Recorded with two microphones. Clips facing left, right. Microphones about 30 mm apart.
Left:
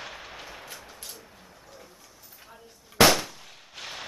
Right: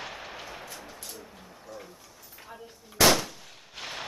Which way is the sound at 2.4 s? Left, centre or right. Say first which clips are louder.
Right 6 dB; centre.